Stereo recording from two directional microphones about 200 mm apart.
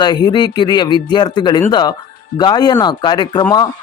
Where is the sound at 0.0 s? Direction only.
20° left (ahead or behind).